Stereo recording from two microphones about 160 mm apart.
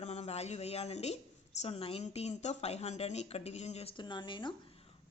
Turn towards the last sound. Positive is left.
turn(degrees=30)  # may be behind; listen again after turning